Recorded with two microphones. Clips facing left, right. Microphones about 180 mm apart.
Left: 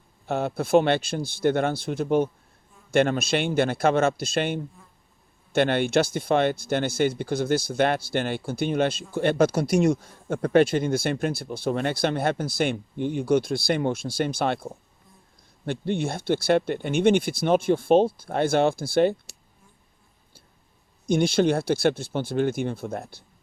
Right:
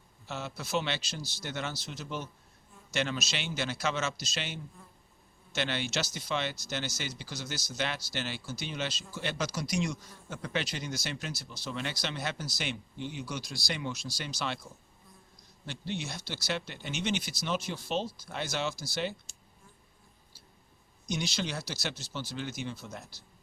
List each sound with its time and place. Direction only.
0.3 s speech: 55° left (ahead or behind)
21.1 s speech: 55° left (ahead or behind)